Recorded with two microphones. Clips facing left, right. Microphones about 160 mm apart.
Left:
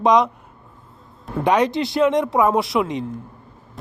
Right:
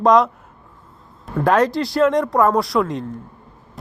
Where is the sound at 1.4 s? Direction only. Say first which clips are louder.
Right 1 dB; centre (ahead or behind).